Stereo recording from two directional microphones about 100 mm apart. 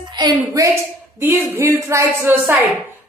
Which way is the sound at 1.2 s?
25° right (ahead or behind).